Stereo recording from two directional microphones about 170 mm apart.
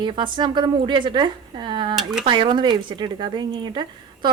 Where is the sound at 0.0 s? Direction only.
25° right (ahead or behind).